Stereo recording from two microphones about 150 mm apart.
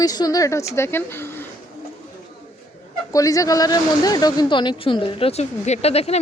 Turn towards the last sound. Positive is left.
turn(degrees=45)  # may be behind; listen again after turning